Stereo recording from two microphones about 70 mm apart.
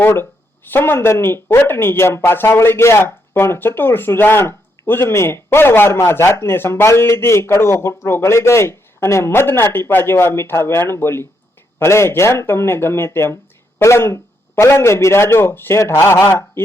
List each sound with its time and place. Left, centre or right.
0.7 s speech: left